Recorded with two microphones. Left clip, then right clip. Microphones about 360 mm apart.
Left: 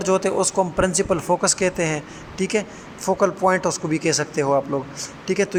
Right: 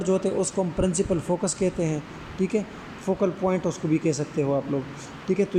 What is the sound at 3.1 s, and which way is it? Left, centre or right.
Speech, left.